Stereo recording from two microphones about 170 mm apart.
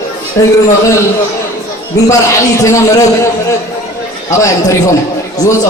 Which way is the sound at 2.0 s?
15° left (ahead or behind).